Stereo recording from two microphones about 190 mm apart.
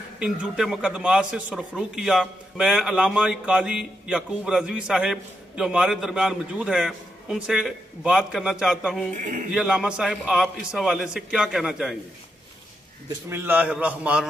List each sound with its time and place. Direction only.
0.2 s a man's voice: 5° right (ahead or behind)
9.1 s speech: 40° right (ahead or behind)
9.5 s a man's voice: 5° right (ahead or behind)
13.3 s a man's voice: 10° right (ahead or behind)